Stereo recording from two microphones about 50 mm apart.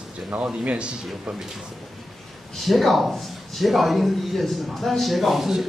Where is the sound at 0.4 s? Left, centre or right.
Right.